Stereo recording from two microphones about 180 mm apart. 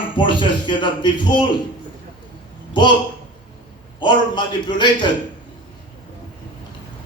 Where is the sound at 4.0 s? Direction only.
25° left (ahead or behind).